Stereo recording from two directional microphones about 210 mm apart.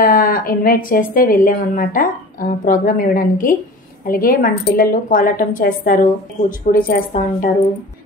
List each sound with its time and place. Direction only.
0.0 s speech: 40° left (ahead or behind)